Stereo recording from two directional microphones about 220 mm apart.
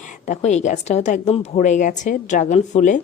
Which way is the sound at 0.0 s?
35° left (ahead or behind).